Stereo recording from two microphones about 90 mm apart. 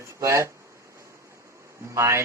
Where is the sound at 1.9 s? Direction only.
35° right (ahead or behind).